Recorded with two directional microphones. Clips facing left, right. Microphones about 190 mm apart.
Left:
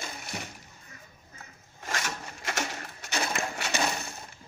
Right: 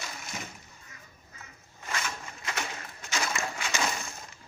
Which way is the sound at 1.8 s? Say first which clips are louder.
Left 1 dB; 45° left (ahead or behind).